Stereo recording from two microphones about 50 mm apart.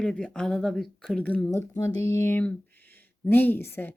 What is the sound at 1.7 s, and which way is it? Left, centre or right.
Speech, left.